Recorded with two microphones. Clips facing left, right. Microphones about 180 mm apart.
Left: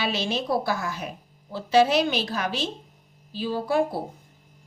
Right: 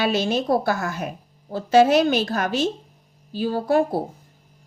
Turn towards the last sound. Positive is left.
turn(degrees=-45)  # may be behind; listen again after turning